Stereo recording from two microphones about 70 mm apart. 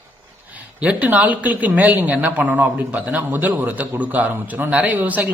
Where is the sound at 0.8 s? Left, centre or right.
Right.